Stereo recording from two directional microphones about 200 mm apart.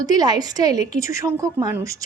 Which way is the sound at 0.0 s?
20° right (ahead or behind).